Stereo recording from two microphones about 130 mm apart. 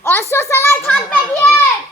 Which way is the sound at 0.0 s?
20° left (ahead or behind).